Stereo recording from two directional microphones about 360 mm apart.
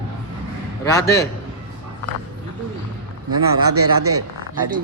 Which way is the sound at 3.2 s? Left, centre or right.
Right.